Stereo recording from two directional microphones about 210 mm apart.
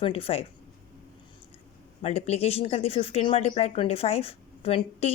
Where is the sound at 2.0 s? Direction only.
30° left (ahead or behind).